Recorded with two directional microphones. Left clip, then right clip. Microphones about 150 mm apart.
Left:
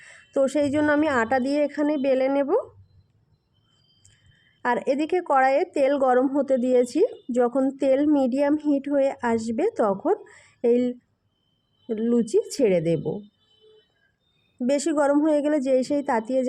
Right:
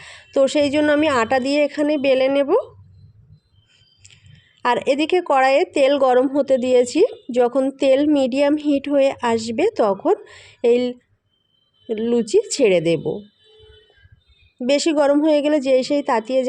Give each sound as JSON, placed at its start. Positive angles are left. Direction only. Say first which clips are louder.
{"t": 0.1, "sound": "a woman's voice", "louder": "right 6 dB", "side_deg": -25}
{"t": 4.6, "sound": "a woman's voice", "louder": "right 5 dB", "side_deg": -30}
{"t": 14.6, "sound": "a woman's voice", "louder": "right 5 dB", "side_deg": -30}